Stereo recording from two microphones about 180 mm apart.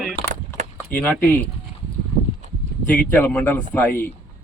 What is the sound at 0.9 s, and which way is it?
Speech, 10° left (ahead or behind).